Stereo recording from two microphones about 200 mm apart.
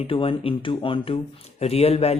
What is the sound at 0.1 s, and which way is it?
A man's voice, 25° left (ahead or behind).